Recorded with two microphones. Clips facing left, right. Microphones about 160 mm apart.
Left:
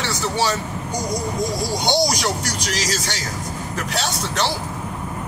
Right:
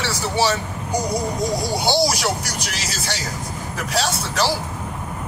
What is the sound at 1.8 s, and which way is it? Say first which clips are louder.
Speech: even; 5° right (ahead or behind).